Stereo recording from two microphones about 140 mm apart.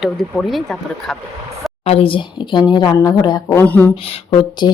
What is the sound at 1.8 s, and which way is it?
Speech, 45° left (ahead or behind).